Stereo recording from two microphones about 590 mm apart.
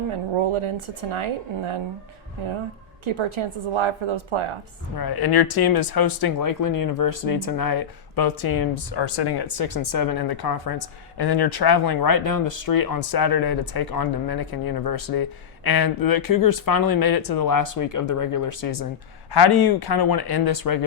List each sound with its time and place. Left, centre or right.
0.1 s speech: right
3.0 s speech: right
4.9 s speech: left